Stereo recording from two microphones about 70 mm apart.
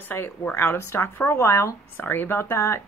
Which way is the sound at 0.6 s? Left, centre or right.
Left.